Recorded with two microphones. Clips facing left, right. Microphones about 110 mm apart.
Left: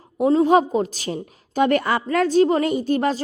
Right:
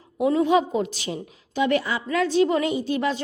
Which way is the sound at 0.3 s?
40° left (ahead or behind).